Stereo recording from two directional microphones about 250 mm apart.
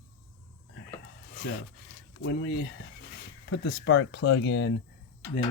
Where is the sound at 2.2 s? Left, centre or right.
Left.